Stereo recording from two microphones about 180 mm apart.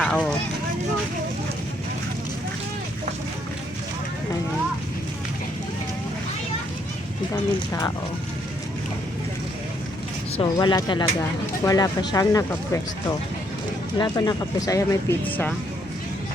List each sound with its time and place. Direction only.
0.0 s speech: 5° left (ahead or behind)
7.7 s speech: 15° left (ahead or behind)
10.3 s speech: 25° left (ahead or behind)
14.0 s speech: 20° left (ahead or behind)